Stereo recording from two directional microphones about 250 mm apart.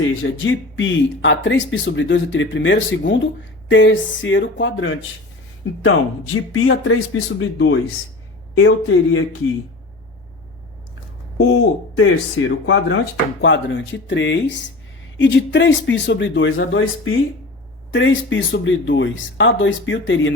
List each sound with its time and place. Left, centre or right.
0.1 s speech: left
11.4 s speech: left